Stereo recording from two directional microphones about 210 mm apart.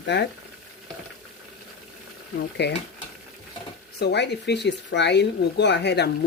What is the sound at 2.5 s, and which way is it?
Speech, 55° left (ahead or behind).